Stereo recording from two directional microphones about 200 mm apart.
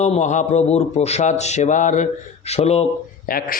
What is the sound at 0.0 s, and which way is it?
Mantra, 35° left (ahead or behind).